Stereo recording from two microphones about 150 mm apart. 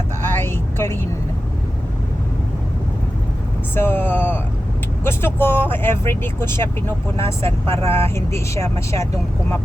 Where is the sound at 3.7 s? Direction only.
15° left (ahead or behind).